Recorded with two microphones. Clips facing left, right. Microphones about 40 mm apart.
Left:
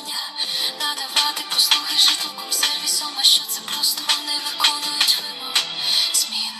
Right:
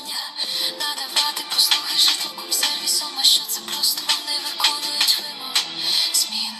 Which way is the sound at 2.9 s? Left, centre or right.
Left.